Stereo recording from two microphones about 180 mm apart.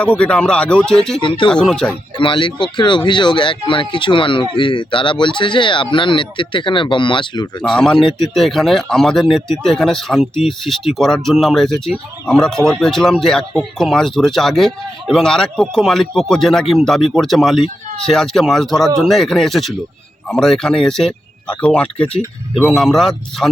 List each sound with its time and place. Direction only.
0.0 s speech: 5° left (ahead or behind)
1.2 s speech: 25° left (ahead or behind)
1.5 s speech: 5° left (ahead or behind)
2.1 s speech: 25° left (ahead or behind)
7.6 s speech: 5° left (ahead or behind)